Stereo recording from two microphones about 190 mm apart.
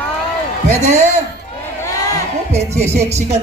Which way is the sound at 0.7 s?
35° right (ahead or behind).